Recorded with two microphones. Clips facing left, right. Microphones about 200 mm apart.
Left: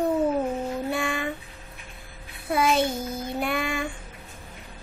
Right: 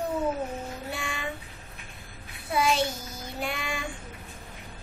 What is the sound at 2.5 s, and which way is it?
Child singing, 55° left (ahead or behind).